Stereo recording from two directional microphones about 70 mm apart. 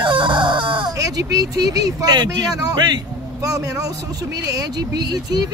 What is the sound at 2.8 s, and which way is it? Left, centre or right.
Vehicle, right.